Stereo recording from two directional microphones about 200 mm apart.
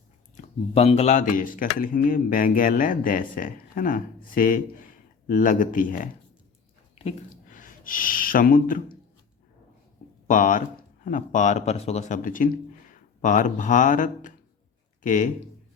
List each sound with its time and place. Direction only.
0.3 s speech: 30° left (ahead or behind)
10.2 s speech: 40° left (ahead or behind)